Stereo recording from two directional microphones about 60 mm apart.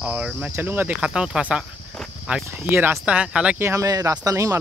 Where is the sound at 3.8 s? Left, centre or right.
Right.